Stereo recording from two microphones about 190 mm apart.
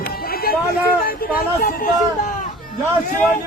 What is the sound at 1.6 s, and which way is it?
Speech, 45° left (ahead or behind).